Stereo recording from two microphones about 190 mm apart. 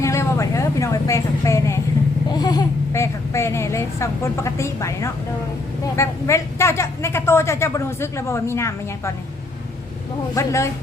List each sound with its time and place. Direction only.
0.0 s a sound: 15° left (ahead or behind)
2.3 s speech: 20° left (ahead or behind)
10.3 s speech: 15° left (ahead or behind)